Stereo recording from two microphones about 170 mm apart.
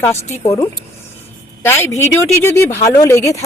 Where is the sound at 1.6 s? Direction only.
15° left (ahead or behind).